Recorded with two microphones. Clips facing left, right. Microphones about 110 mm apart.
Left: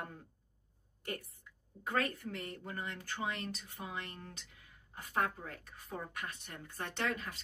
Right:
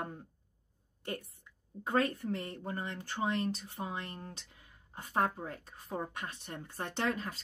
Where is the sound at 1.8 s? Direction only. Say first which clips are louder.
Right 5 dB; 30° right (ahead or behind).